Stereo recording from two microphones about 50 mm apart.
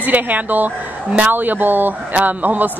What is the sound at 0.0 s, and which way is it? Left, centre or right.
A woman's voice, right.